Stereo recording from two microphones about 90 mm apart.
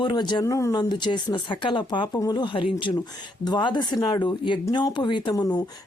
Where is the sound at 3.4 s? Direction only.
55° left (ahead or behind).